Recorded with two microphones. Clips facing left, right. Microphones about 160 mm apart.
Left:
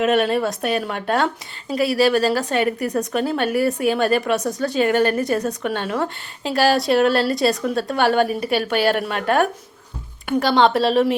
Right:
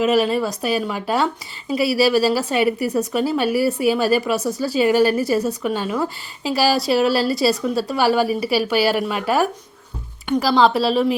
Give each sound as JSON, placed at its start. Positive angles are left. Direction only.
{"t": 0.0, "sound": "a woman's voice", "side_deg": 0}